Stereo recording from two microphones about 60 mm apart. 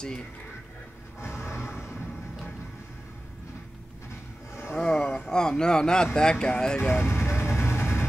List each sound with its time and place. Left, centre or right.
1.2 s music: left
4.7 s a sound: centre
6.1 s speech: centre
6.8 s vehicle: left